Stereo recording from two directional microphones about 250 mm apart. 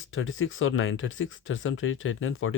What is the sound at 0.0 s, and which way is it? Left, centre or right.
Speech, left.